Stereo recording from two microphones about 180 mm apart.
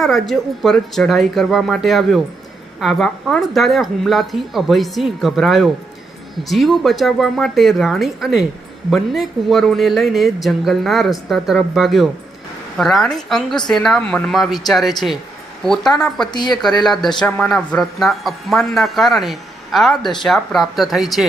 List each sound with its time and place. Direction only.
0.0 s speech: centre (ahead or behind)